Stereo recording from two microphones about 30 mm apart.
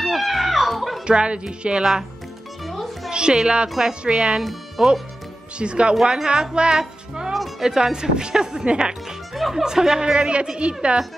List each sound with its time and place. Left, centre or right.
0.0 s music: centre
1.0 s a woman's voice: right
1.8 s speech: centre
2.6 s music: centre
3.1 s a woman's voice: right
6.8 s music: right
7.6 s speech: right
9.3 s music: centre
9.6 s speech: centre
10.1 s a woman's voice: right